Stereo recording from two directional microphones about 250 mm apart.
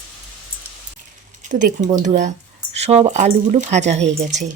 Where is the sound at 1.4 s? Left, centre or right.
Right.